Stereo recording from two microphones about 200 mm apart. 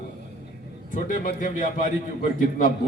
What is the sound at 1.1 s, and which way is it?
Speech, 40° left (ahead or behind).